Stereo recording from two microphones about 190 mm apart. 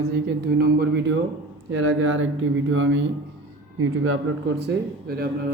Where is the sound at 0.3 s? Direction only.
55° right (ahead or behind).